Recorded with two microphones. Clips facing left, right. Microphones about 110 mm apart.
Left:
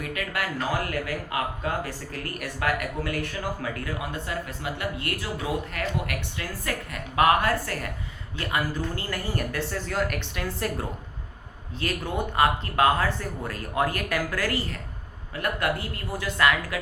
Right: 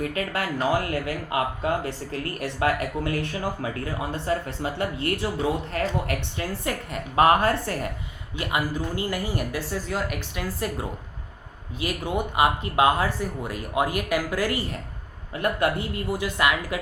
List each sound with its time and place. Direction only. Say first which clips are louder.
0.0 s speech: right 3 dB; 30° right (ahead or behind)
8.4 s speech: right 1 dB; 15° right (ahead or behind)